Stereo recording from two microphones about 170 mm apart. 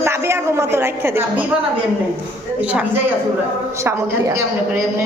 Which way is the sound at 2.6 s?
10° right (ahead or behind).